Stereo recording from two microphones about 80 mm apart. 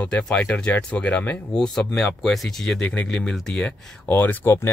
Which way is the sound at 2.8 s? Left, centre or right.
Centre.